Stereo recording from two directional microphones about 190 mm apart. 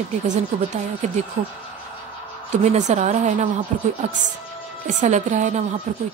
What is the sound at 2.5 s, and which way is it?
Speech, 35° right (ahead or behind).